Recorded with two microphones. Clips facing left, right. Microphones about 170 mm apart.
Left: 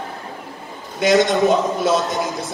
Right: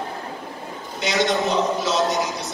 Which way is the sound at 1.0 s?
50° left (ahead or behind).